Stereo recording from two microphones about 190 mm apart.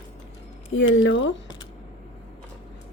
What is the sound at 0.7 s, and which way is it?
Speech, 80° left.